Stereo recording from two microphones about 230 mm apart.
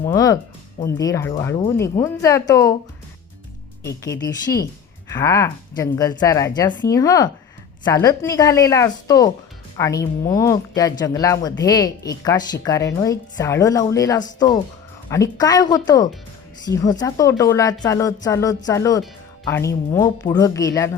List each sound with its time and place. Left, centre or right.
0.1 s speech: centre
3.8 s speech: centre